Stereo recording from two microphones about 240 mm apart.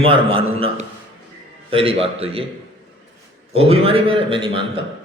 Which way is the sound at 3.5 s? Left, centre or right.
Right.